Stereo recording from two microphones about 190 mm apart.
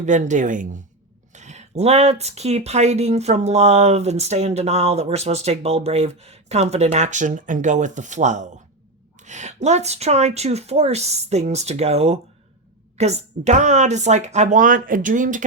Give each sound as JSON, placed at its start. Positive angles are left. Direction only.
{"t": 0.0, "sound": "speech", "side_deg": -40}